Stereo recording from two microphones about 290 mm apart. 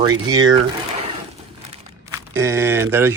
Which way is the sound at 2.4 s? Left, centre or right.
Centre.